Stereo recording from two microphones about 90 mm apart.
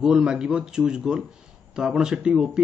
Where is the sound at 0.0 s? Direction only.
5° right (ahead or behind).